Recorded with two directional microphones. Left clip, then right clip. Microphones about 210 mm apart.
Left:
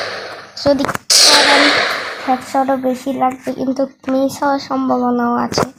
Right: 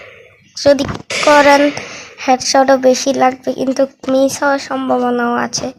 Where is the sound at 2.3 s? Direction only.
20° right (ahead or behind); by 4.8 s centre (ahead or behind).